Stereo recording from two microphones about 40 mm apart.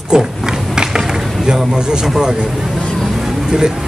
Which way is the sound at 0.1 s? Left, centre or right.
Centre.